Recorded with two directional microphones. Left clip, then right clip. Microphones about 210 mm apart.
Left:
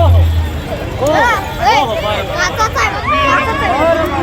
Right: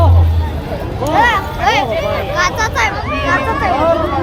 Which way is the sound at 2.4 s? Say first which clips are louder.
Even; centre (ahead or behind).